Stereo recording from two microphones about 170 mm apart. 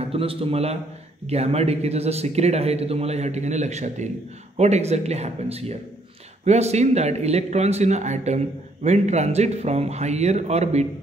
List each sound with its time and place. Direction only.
0.0 s a man's voice: 35° right (ahead or behind)